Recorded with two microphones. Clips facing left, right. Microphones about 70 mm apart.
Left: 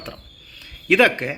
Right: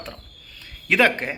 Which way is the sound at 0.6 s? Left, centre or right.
Right.